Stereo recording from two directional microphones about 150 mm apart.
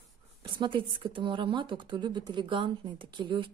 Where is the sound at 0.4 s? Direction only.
35° right (ahead or behind).